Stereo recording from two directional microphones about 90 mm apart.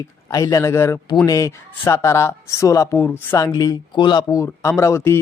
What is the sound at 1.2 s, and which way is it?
Speech, 40° left (ahead or behind).